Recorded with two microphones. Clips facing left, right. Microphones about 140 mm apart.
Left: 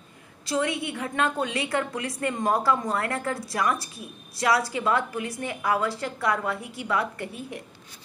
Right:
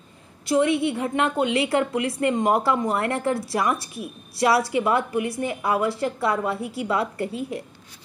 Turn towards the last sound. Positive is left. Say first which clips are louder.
# right 7 dB
turn(degrees=-25)  # may be behind; listen again after turning